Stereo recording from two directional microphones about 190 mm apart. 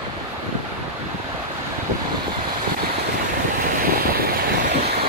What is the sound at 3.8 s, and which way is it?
Vehicle, 50° right (ahead or behind).